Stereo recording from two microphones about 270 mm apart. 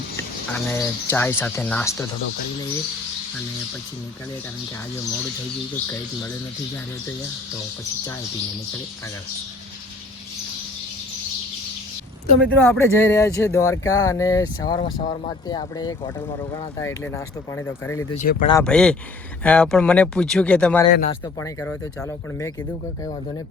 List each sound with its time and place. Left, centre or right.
0.5 s speech: centre
12.4 s speech: centre
14.8 s speech: left
18.1 s speech: left
18.5 s speech: centre